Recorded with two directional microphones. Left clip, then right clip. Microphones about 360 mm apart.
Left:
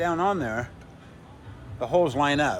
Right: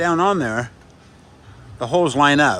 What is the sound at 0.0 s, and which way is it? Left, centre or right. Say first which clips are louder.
Speech: right 7 dB; right.